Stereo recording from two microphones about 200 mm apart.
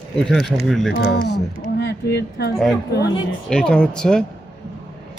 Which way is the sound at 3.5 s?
5° left (ahead or behind).